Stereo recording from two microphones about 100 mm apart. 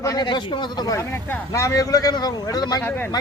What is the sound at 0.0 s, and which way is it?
Speech, 30° left (ahead or behind).